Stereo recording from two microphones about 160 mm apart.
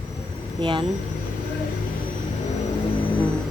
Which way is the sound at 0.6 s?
30° right (ahead or behind).